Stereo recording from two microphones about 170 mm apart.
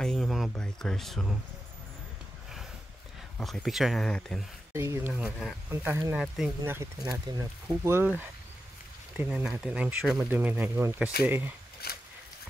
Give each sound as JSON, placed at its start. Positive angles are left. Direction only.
{"t": 0.0, "sound": "speech", "side_deg": 0}
{"t": 3.3, "sound": "speech", "side_deg": 0}
{"t": 4.7, "sound": "speech", "side_deg": -15}
{"t": 5.1, "sound": "speech", "side_deg": -5}
{"t": 6.6, "sound": "speech", "side_deg": -15}
{"t": 7.6, "sound": "speech", "side_deg": -10}